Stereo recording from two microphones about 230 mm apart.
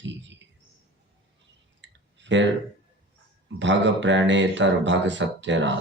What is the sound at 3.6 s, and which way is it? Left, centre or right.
Speech, right.